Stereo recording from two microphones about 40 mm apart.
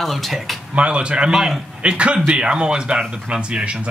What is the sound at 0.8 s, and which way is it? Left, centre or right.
Speech, right.